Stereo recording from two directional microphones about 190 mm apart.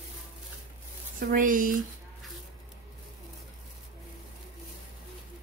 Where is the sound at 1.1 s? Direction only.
45° right (ahead or behind).